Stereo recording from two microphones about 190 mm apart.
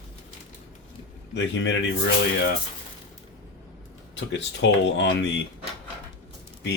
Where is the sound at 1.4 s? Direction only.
70° left (ahead or behind).